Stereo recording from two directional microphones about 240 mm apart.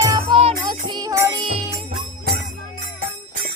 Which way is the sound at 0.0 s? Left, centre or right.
Centre.